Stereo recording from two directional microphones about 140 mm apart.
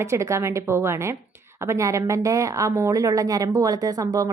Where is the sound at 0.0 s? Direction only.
20° right (ahead or behind).